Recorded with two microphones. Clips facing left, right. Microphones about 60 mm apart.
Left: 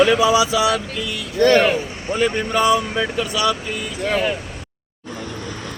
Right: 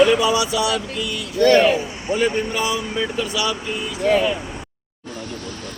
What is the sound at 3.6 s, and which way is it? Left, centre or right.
Speech, left.